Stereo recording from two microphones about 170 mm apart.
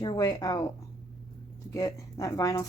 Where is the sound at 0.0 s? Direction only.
20° left (ahead or behind).